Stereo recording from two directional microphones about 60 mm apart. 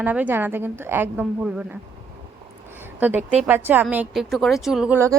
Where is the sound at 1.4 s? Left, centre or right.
Centre.